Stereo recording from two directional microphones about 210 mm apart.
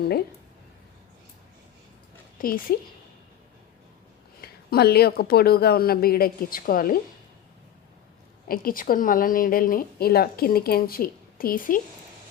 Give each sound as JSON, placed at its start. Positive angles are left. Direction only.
{"t": 2.4, "sound": "a woman's voice", "side_deg": 45}
{"t": 4.4, "sound": "a woman's voice", "side_deg": 50}
{"t": 8.4, "sound": "a woman's voice", "side_deg": 40}